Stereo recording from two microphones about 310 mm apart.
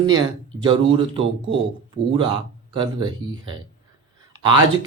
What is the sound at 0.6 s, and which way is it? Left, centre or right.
Speech, centre.